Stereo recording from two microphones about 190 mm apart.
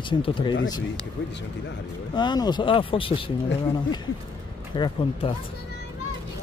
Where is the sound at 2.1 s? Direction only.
25° left (ahead or behind).